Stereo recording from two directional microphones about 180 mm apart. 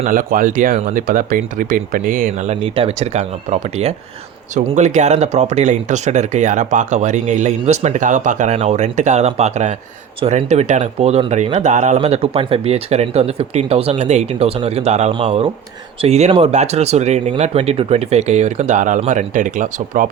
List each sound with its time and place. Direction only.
0.0 s speech: 50° right (ahead or behind)